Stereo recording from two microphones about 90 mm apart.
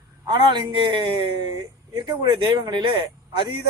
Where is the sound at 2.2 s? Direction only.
55° right (ahead or behind).